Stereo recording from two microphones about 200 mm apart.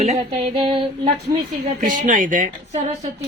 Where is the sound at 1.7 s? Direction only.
40° right (ahead or behind).